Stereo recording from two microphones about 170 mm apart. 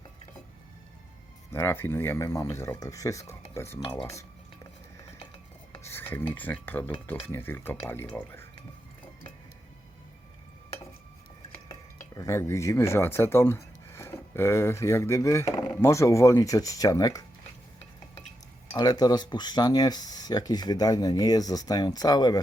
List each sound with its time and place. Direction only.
1.5 s dishes: 15° left (ahead or behind)
3.8 s a sound: 20° left (ahead or behind)
5.8 s dishes: 15° left (ahead or behind)
12.1 s speech: 20° left (ahead or behind)
18.7 s speech: 20° left (ahead or behind)